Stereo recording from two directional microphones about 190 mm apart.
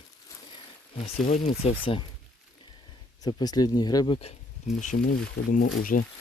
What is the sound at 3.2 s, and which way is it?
Speech, 20° left (ahead or behind).